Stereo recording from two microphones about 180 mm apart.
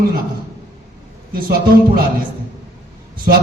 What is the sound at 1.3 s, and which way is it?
Speech, 55° right (ahead or behind).